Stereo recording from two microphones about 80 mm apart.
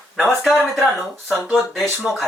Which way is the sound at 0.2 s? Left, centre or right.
Centre.